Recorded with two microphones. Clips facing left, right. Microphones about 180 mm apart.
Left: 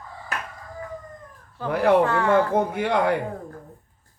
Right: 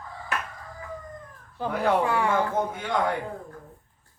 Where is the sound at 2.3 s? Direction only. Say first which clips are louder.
Left 5 dB; 65° left (ahead or behind).